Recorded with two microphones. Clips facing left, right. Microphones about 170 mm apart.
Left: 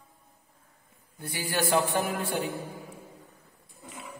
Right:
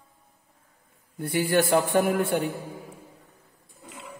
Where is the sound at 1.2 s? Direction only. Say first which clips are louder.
Right 8 dB; 55° right (ahead or behind).